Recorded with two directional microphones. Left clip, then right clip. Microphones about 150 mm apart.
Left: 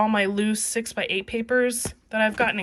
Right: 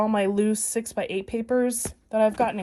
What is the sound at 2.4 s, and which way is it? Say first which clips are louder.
Speech: left 2 dB; 20° right (ahead or behind).